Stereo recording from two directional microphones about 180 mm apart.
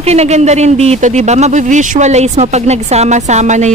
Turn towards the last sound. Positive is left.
turn(degrees=-40)  # may be behind; listen again after turning